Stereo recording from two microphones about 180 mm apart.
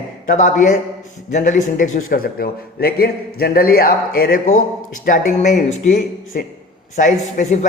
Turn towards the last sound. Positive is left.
turn(degrees=45)  # may be behind; listen again after turning